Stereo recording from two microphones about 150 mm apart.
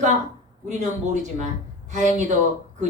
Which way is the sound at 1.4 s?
50° right (ahead or behind).